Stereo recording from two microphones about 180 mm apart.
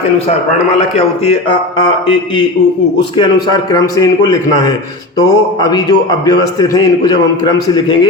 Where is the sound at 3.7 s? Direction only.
20° left (ahead or behind).